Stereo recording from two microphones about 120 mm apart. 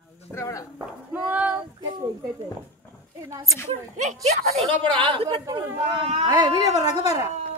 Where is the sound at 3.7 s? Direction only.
85° right.